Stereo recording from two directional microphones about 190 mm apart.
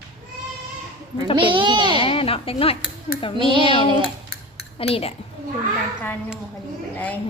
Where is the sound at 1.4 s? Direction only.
25° right (ahead or behind).